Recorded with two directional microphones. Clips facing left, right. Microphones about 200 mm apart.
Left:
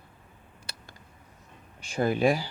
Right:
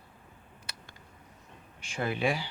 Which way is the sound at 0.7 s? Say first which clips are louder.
Left 2 dB; 30° left (ahead or behind).